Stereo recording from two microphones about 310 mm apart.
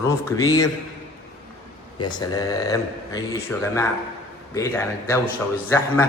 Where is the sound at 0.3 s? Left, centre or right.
Centre.